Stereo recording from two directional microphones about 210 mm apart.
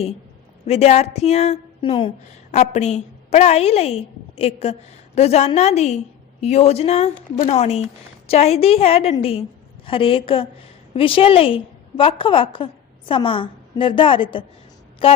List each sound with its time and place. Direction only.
0.6 s a woman's voice: 30° left (ahead or behind)